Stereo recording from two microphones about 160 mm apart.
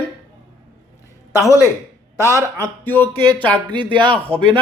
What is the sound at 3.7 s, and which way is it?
Speech, 30° right (ahead or behind).